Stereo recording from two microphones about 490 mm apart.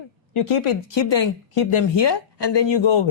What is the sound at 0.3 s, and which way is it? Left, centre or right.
Speech, left.